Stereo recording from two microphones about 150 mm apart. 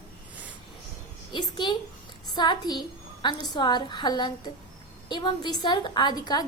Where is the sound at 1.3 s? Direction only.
30° left (ahead or behind).